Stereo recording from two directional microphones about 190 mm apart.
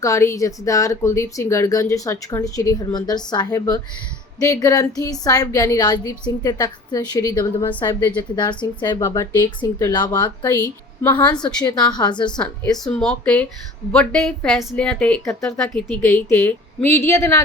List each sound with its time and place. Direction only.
0.0 s a woman's voice: 15° left (ahead or behind)
12.4 s speech: 5° left (ahead or behind)